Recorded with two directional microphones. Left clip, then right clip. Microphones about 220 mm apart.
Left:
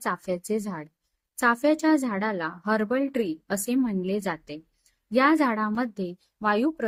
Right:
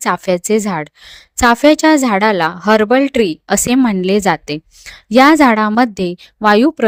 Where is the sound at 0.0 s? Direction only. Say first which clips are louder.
Right 14 dB; 40° right (ahead or behind).